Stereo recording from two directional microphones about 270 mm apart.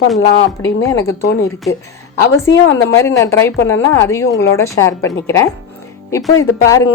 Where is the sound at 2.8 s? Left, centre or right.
Centre.